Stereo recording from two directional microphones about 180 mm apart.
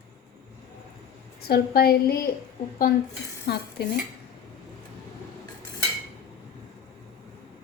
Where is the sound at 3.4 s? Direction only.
60° left (ahead or behind).